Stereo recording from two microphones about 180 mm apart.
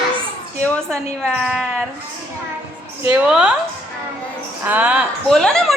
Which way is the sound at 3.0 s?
5° right (ahead or behind).